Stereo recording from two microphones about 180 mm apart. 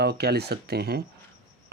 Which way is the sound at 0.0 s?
65° right (ahead or behind).